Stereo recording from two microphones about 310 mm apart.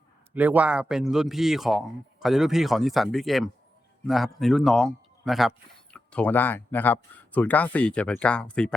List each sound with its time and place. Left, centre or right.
0.3 s a man's voice: centre